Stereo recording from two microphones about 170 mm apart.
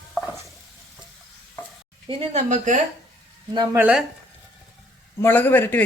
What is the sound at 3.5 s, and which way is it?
Speech, 25° right (ahead or behind).